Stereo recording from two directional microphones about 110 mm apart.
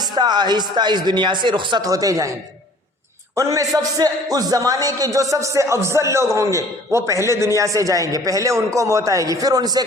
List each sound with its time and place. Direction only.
0.2 s a man's voice: 40° right (ahead or behind)
1.9 s a man's voice: 30° right (ahead or behind)
3.3 s a man's voice: 30° right (ahead or behind)